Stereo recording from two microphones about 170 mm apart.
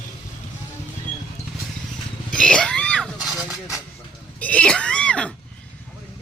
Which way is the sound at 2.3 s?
5° left (ahead or behind).